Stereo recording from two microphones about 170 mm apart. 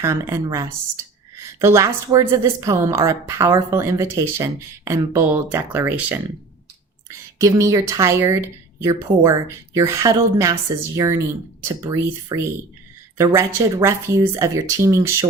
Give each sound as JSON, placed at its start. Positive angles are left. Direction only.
{"t": 0.0, "sound": "a woman's voice", "side_deg": -15}